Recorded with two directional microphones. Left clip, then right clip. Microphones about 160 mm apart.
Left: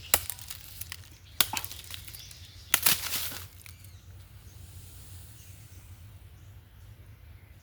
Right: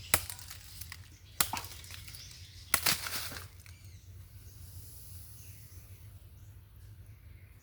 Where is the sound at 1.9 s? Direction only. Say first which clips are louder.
Left 4 dB; 50° left (ahead or behind).